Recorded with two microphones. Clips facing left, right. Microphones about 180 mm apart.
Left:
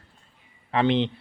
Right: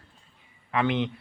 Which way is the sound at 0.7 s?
30° left (ahead or behind).